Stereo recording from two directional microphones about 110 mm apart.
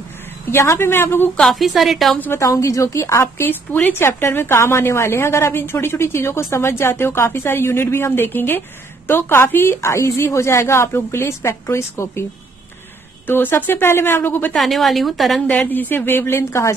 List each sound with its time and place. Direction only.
0.5 s a woman's voice: 20° left (ahead or behind)
1.3 s a woman's voice: 5° left (ahead or behind)
2.1 s a woman's voice: 20° left (ahead or behind)
13.3 s a woman's voice: 20° left (ahead or behind)
14.6 s a woman's voice: centre (ahead or behind)
15.4 s a woman's voice: 15° left (ahead or behind)